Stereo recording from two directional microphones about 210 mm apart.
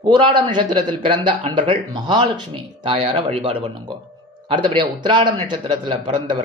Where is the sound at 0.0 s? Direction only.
20° right (ahead or behind).